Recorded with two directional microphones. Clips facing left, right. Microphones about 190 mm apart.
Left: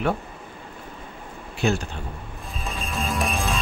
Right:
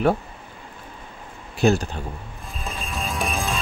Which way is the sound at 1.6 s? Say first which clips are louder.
Right 5 dB; 40° right (ahead or behind).